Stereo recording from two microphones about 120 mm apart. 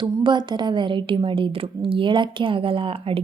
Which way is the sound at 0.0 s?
40° right (ahead or behind).